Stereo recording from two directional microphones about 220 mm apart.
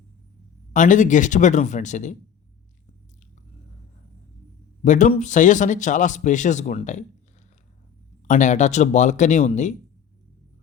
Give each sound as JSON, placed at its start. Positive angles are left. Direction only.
{"t": 0.7, "sound": "a man's voice", "side_deg": 35}
{"t": 4.8, "sound": "a man's voice", "side_deg": 35}
{"t": 8.3, "sound": "a man's voice", "side_deg": 35}